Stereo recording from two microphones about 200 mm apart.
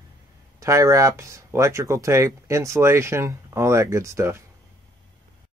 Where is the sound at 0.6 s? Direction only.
15° right (ahead or behind).